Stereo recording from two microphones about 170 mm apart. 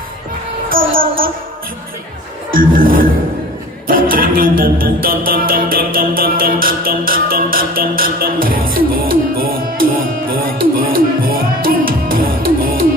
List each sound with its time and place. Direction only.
0.7 s music: 55° right (ahead or behind)
2.5 s music: 55° right (ahead or behind)